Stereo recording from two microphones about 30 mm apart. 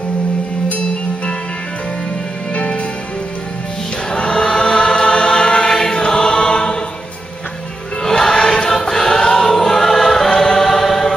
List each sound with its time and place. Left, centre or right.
2.5 s music: left
4.2 s choir: left
5.7 s choir: centre
8.0 s music: centre
8.6 s choir: centre